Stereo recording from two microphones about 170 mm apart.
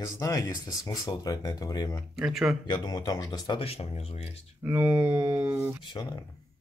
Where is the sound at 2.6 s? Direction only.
25° left (ahead or behind).